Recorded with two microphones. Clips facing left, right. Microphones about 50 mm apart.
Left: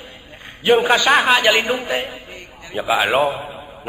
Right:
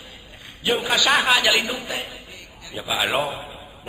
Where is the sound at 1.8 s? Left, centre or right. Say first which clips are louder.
Left 7 dB; left.